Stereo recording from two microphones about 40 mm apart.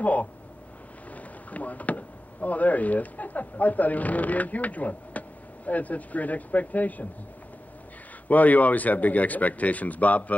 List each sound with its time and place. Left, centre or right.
0.0 s speech: left
8.3 s speech: left